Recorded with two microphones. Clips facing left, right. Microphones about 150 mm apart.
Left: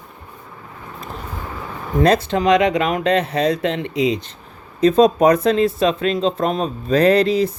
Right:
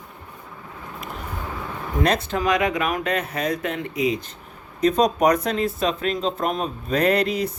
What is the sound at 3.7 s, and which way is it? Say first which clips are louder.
Speech: left 6 dB; 70° left (ahead or behind).